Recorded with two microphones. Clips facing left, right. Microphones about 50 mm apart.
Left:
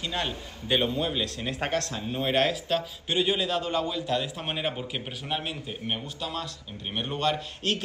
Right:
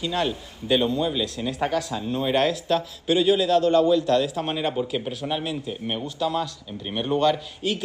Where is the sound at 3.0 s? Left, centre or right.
Centre.